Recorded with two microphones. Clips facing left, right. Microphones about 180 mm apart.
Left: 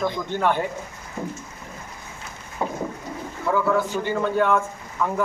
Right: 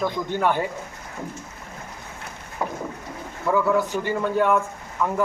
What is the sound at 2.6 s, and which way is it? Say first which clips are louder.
Boat: left 1 dB; 20° left (ahead or behind).